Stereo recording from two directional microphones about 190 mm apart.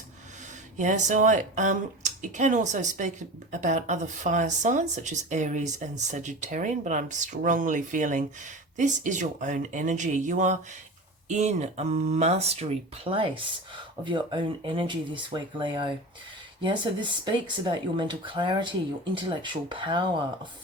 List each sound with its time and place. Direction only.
0.8 s speech: 40° right (ahead or behind); by 20.5 s 25° right (ahead or behind)